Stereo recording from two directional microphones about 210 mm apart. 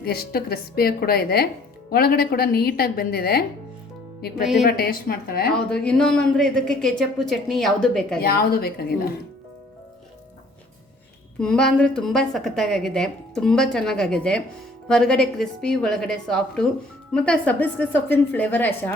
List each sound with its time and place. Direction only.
0.0 s speech: 45° left (ahead or behind)
4.6 s speech: 45° left (ahead or behind)
5.5 s a woman's voice: 5° left (ahead or behind)
8.2 s speech: 45° left (ahead or behind)
11.3 s a woman's voice: 5° left (ahead or behind)